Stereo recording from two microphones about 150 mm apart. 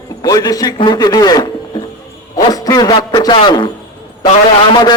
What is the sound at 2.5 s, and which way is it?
A man's voice, 25° left (ahead or behind).